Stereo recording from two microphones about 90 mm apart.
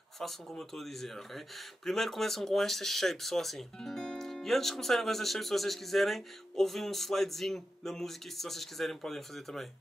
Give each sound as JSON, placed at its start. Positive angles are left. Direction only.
{"t": 0.2, "sound": "speech", "side_deg": 5}